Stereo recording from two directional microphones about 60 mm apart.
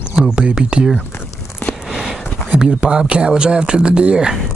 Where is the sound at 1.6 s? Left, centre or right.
Left.